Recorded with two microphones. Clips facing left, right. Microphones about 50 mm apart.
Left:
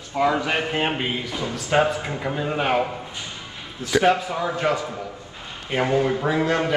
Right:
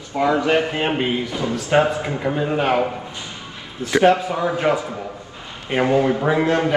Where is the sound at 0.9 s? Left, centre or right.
Right.